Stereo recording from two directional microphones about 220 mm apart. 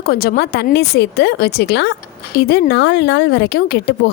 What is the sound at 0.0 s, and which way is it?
Speech, 45° left (ahead or behind).